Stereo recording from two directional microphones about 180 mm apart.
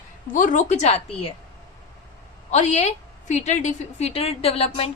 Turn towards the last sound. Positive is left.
turn(degrees=35)  # may be behind; listen again after turning